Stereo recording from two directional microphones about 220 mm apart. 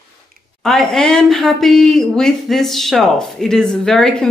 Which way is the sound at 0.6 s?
Centre (ahead or behind).